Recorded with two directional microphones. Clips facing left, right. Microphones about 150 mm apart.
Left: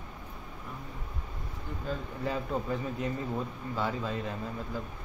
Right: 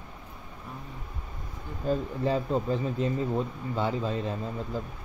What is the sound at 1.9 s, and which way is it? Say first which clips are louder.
Speech: right 7 dB; 30° right (ahead or behind).